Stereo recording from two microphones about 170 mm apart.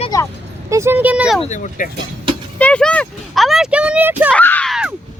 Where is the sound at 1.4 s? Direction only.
45° left (ahead or behind).